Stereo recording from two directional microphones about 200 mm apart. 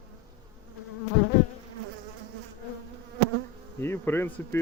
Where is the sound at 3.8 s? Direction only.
10° left (ahead or behind).